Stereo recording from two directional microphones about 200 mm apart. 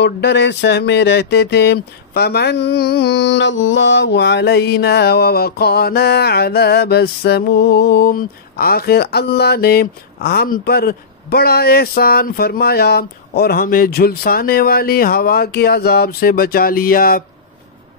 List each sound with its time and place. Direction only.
0.0 s speech: 60° left (ahead or behind)